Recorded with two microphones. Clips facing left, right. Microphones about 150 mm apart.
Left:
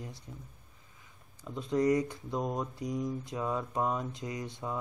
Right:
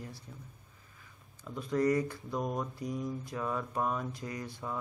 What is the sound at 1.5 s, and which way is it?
Speech, 20° left (ahead or behind).